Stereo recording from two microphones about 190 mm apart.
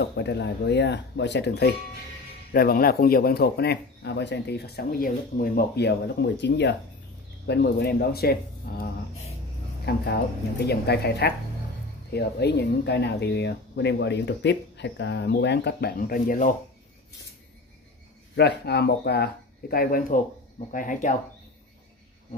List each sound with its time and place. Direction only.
0.0 s speech: 60° left (ahead or behind)
9.8 s speech: 60° left (ahead or behind)
18.3 s speech: 60° left (ahead or behind); by 21.1 s 45° left (ahead or behind)